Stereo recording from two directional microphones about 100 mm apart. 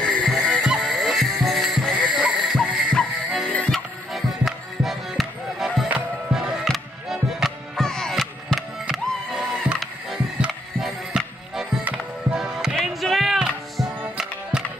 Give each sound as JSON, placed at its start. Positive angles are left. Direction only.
{"t": 0.0, "sound": "music", "side_deg": 5}
{"t": 3.7, "sound": "music", "side_deg": 0}